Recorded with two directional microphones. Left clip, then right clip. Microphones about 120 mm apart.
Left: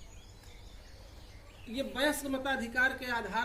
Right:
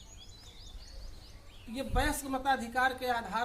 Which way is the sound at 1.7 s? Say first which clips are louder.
Left 1 dB; 35° right (ahead or behind).